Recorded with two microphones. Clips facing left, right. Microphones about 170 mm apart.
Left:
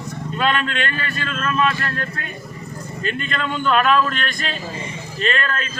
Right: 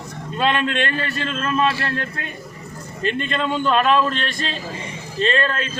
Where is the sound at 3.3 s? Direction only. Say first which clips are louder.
Left 1 dB; 30° right (ahead or behind).